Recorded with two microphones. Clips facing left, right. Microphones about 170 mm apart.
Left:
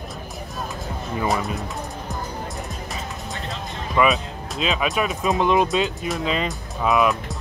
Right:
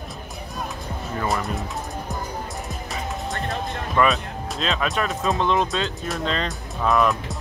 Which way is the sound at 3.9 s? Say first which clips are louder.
Left 1 dB; centre (ahead or behind).